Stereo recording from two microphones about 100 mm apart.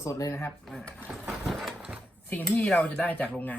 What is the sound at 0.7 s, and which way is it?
Speech, 5° left (ahead or behind).